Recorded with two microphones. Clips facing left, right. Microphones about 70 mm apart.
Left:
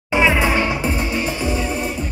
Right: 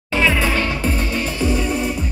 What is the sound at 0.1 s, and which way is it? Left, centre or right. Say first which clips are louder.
Music: left 2 dB; centre.